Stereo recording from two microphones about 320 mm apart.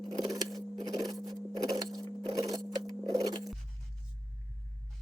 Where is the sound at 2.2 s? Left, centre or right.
Centre.